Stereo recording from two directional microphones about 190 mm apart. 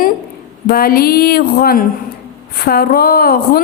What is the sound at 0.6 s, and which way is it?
Speech, 50° left (ahead or behind).